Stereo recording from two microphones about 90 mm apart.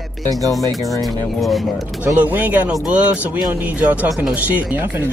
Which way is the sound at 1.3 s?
Centre (ahead or behind).